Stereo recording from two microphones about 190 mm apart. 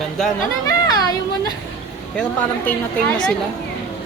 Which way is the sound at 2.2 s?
10° left (ahead or behind).